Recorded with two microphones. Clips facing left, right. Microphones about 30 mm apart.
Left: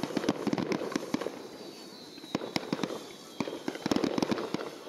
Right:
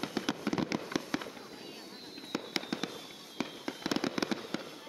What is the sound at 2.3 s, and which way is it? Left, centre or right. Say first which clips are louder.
Fireworks: left 3 dB; centre.